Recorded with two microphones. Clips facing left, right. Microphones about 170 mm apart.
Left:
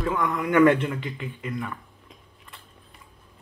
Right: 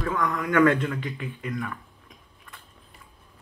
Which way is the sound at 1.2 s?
Centre (ahead or behind).